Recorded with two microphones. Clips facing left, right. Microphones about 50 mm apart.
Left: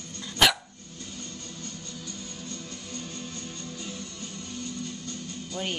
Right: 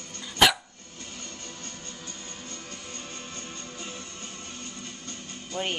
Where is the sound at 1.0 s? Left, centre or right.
Right.